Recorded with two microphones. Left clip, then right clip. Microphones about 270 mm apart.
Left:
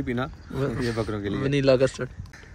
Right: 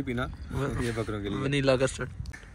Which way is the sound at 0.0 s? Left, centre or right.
Centre.